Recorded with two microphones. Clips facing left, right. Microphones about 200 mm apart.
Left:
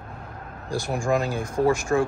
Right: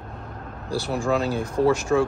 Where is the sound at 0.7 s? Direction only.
10° left (ahead or behind).